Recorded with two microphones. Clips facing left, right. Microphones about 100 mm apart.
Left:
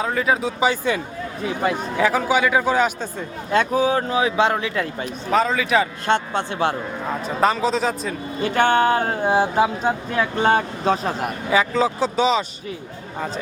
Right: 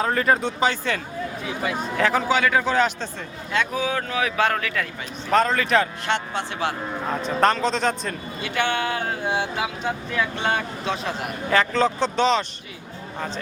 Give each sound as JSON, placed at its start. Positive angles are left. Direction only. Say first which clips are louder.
{"t": 0.0, "sound": "a man's voice", "louder": "even", "side_deg": 0}
{"t": 3.5, "sound": "speech", "louder": "left 6 dB", "side_deg": 40}
{"t": 5.3, "sound": "speech", "louder": "even", "side_deg": 5}
{"t": 6.1, "sound": "speech", "louder": "left 5 dB", "side_deg": 35}
{"t": 7.3, "sound": "speech", "louder": "left 1 dB", "side_deg": 5}
{"t": 8.4, "sound": "speech", "louder": "left 8 dB", "side_deg": 45}
{"t": 11.5, "sound": "a man's voice", "louder": "left 1 dB", "side_deg": 5}